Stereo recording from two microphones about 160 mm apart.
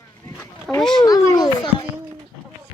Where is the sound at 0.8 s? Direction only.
5° left (ahead or behind).